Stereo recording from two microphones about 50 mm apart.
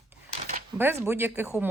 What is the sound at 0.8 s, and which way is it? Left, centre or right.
Speech, right.